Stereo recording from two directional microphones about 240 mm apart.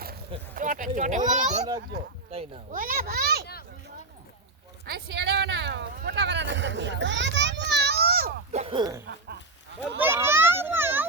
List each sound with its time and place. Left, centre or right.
0.5 s a child's voice: right
4.9 s speech: right
8.5 s speech: right
10.0 s children playing: centre